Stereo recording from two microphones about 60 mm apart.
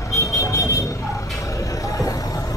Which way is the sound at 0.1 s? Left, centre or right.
Left.